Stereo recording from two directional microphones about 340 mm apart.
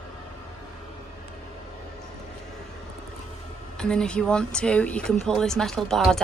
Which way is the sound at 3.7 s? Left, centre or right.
Centre.